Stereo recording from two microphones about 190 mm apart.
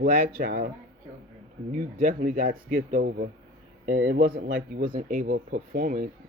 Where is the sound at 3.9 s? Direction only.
90° right.